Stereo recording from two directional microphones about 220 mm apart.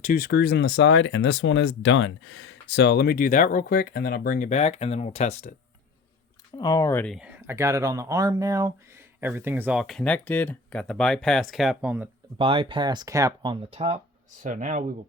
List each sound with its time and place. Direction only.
0.0 s speech: 40° left (ahead or behind)
6.6 s speech: 15° left (ahead or behind); by 12.0 s 5° right (ahead or behind)
12.4 s speech: 25° right (ahead or behind)